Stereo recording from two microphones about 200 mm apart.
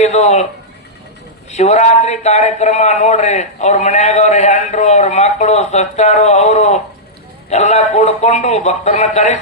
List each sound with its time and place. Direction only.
0.0 s a man's voice: 35° left (ahead or behind)
1.5 s a man's voice: 35° left (ahead or behind)